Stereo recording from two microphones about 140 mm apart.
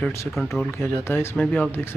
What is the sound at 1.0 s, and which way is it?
Speech, 15° left (ahead or behind).